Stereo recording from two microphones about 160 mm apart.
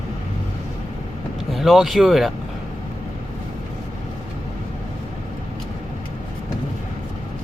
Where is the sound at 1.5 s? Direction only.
Centre (ahead or behind).